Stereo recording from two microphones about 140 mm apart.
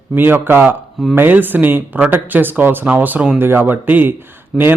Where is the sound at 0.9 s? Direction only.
Centre (ahead or behind).